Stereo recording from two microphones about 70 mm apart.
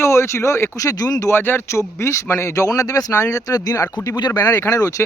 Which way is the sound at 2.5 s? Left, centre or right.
Left.